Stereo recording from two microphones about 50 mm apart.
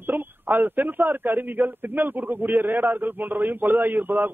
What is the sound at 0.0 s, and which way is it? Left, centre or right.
Speech, right.